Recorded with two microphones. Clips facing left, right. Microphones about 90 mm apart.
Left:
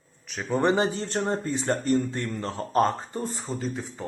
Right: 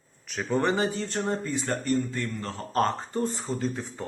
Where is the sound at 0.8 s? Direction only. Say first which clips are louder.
Left 2 dB; 35° left (ahead or behind).